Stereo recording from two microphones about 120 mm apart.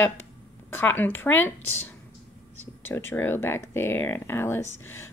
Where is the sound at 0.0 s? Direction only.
15° left (ahead or behind).